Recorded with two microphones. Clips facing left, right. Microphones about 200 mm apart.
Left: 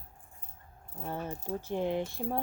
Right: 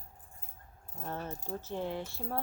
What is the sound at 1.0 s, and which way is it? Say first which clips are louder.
Speech: left 3 dB; 10° left (ahead or behind).